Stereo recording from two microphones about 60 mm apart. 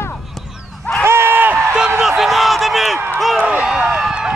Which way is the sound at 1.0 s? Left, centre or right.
Right.